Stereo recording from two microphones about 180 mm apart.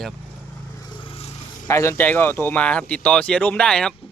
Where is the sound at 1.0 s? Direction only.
30° left (ahead or behind).